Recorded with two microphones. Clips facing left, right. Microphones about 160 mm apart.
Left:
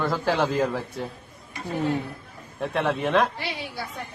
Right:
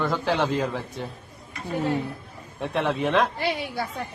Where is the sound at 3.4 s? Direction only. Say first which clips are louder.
Right 6 dB; 55° right (ahead or behind).